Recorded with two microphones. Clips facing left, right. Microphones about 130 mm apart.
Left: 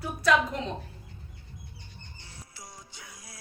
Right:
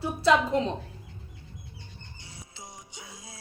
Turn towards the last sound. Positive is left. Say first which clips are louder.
# right 3 dB
turn(degrees=-20)  # may be behind; listen again after turning